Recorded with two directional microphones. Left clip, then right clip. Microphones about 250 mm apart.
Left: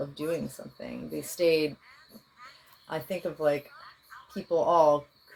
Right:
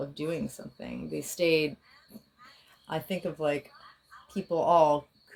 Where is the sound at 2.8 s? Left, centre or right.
Right.